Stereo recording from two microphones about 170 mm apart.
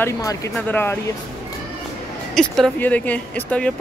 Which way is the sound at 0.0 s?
20° left (ahead or behind).